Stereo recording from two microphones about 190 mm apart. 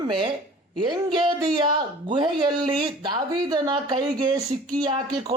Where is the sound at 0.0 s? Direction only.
25° right (ahead or behind).